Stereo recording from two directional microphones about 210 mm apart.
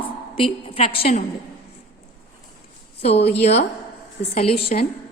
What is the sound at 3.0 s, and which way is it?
A woman's voice, 30° left (ahead or behind).